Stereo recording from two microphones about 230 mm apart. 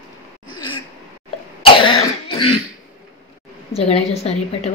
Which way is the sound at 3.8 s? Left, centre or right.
Left.